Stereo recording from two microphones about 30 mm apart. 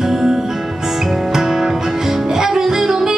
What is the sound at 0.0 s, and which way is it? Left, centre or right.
Music, centre.